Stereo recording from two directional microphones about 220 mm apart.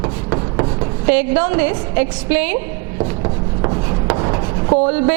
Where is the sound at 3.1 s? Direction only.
20° right (ahead or behind).